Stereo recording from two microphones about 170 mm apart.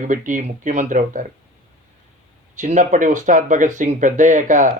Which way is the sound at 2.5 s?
45° right (ahead or behind).